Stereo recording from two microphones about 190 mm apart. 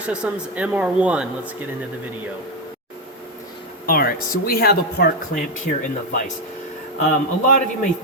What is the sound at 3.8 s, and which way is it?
Speech, 50° left (ahead or behind).